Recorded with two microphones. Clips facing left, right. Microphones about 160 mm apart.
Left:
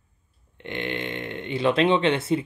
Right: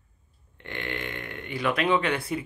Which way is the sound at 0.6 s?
20° left (ahead or behind).